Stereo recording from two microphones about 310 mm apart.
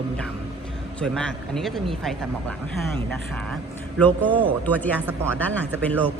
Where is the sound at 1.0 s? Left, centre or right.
Centre.